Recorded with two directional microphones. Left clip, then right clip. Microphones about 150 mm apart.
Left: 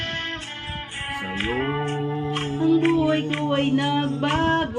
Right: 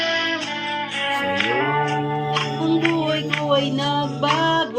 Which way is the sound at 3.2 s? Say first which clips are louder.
Right 3 dB; 40° right (ahead or behind).